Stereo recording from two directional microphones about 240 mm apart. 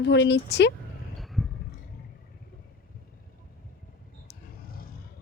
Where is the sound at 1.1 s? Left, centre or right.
Centre.